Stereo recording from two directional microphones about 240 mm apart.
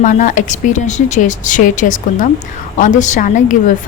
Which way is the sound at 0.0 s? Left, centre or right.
Left.